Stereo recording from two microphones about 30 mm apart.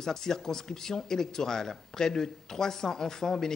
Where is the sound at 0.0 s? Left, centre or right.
Centre.